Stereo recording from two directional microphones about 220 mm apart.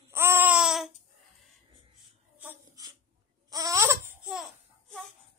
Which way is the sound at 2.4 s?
10° right (ahead or behind).